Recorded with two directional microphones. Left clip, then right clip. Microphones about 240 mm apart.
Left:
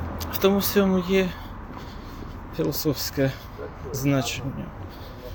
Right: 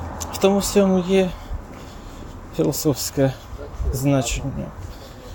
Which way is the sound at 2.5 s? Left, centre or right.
Right.